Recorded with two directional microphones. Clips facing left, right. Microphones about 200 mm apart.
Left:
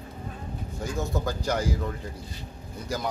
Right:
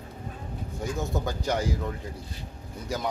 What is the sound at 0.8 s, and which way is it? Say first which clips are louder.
A man's voice: even; centre (ahead or behind).